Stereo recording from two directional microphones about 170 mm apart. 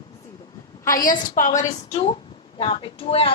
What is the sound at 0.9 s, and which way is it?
A woman's voice, 55° left (ahead or behind).